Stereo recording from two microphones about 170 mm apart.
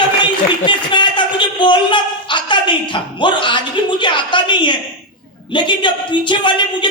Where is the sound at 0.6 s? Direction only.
30° left (ahead or behind).